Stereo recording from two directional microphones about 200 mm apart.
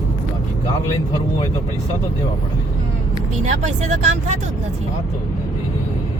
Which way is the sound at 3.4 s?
35° right (ahead or behind).